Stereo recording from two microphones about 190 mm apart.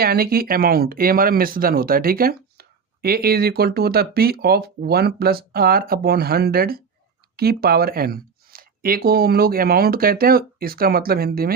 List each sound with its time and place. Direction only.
0.0 s speech: 50° right (ahead or behind)